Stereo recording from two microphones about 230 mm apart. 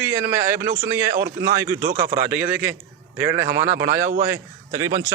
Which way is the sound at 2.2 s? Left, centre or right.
Centre.